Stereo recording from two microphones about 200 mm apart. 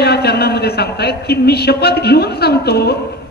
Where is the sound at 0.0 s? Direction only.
55° left (ahead or behind).